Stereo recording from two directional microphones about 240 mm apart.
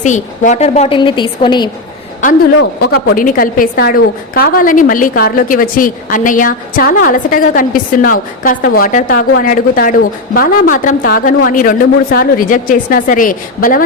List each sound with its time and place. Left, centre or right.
0.0 s a woman's voice: left
2.2 s a woman's voice: left